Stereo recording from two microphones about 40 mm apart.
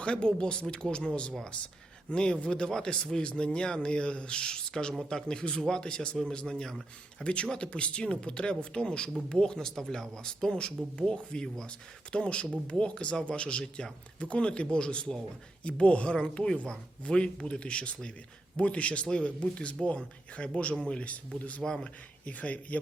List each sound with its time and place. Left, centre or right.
0.0 s speech: left; by 7.4 s centre
7.5 s speech: left
9.6 s speech: centre; by 20.5 s left
21.0 s speech: left